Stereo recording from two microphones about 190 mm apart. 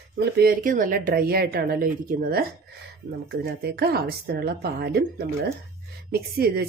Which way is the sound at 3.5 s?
55° right (ahead or behind).